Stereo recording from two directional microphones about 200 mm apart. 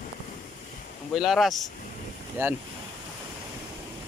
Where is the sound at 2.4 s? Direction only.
10° right (ahead or behind).